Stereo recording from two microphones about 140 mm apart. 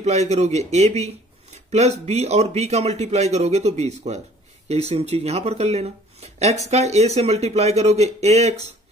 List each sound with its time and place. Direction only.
0.0 s speech: 55° right (ahead or behind)